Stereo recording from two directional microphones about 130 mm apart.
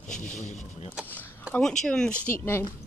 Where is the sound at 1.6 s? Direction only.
5° left (ahead or behind).